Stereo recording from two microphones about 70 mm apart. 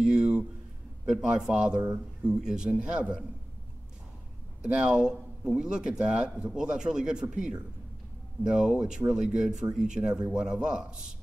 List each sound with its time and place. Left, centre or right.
0.0 s a sound: centre
1.0 s a man's voice: centre
4.6 s a man's voice: centre